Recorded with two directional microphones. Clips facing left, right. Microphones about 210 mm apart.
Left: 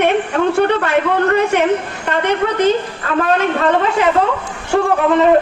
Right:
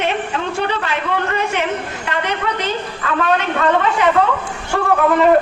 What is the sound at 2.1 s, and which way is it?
Speech, 50° left (ahead or behind).